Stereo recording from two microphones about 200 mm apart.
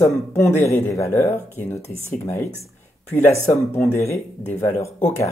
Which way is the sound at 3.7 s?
10° left (ahead or behind).